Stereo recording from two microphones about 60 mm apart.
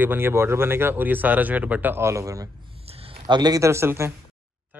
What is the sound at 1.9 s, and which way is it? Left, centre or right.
Speech, right.